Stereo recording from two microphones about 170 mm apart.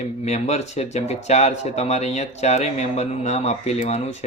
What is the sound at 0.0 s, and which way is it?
Speech, 40° left (ahead or behind).